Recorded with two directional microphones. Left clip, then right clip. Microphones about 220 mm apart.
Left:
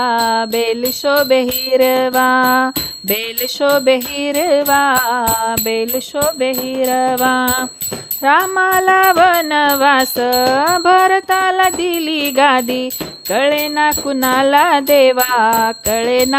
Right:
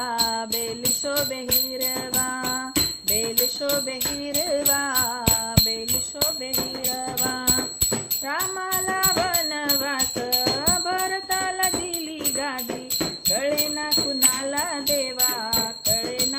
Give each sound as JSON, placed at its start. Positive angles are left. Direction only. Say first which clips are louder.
{"t": 0.0, "sound": "music", "louder": "left 11 dB", "side_deg": 40}
{"t": 6.9, "sound": "music", "louder": "left 16 dB", "side_deg": 50}